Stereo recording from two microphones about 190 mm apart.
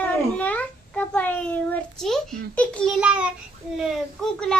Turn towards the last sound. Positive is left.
turn(degrees=0)  # may be behind; listen again after turning